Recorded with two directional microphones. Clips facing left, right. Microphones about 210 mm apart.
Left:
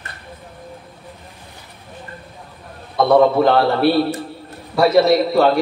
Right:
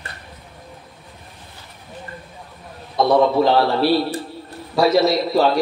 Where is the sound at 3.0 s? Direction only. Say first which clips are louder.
Left 3 dB; 55° left (ahead or behind).